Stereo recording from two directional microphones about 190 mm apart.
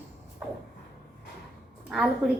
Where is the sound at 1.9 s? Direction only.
Centre (ahead or behind).